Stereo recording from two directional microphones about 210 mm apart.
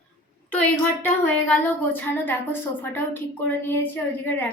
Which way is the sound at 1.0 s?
10° left (ahead or behind).